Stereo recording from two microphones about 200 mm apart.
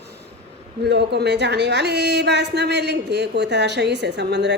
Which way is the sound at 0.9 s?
55° right (ahead or behind).